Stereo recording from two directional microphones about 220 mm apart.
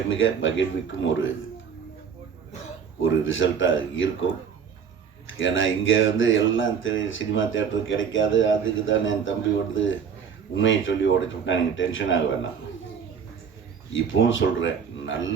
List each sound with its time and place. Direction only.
0.1 s speech: 60° left (ahead or behind)
3.0 s speech: 60° left (ahead or behind)
5.4 s speech: 60° left (ahead or behind)
13.9 s speech: 60° left (ahead or behind)